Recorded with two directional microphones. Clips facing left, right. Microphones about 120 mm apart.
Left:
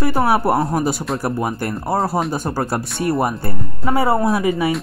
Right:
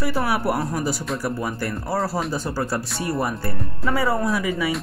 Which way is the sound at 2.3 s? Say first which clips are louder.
Left 4 dB; 50° left (ahead or behind).